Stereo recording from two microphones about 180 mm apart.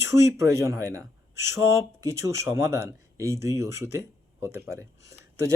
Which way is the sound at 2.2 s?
15° right (ahead or behind).